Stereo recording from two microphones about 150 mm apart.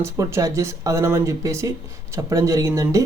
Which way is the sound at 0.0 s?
20° right (ahead or behind).